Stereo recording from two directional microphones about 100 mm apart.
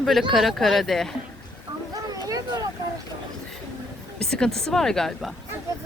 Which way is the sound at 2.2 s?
35° right (ahead or behind).